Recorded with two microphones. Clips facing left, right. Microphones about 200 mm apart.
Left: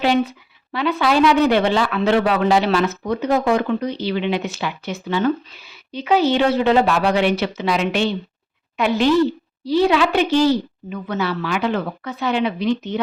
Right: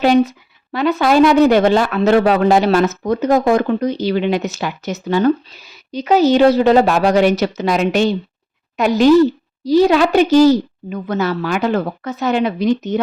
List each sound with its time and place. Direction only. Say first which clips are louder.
0.0 s a woman's voice: right 5 dB; 45° right (ahead or behind)